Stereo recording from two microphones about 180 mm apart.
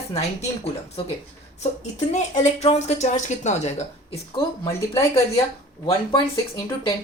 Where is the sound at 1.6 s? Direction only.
40° left (ahead or behind).